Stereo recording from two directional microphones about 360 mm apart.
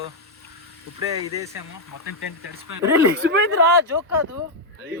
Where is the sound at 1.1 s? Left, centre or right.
Centre.